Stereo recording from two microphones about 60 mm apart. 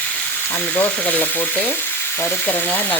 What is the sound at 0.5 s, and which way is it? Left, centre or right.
Speech, left.